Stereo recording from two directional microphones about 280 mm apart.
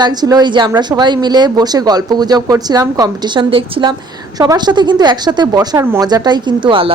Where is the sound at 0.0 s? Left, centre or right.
Centre.